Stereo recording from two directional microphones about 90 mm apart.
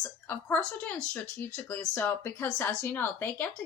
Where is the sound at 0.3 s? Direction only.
20° left (ahead or behind).